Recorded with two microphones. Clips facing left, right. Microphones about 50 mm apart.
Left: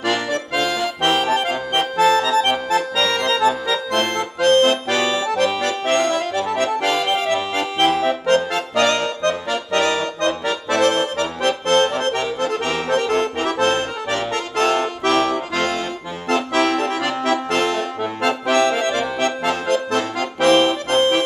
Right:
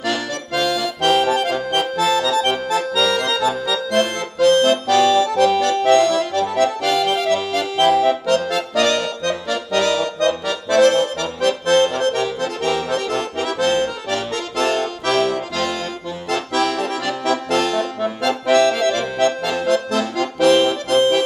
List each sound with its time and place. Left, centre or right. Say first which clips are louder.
0.0 s accordion: left 2 dB; left
2.7 s accordion: right 1 dB; left
7.8 s accordion: right 3 dB; left
19.2 s accordion: right 4 dB; left
20.3 s music: even; left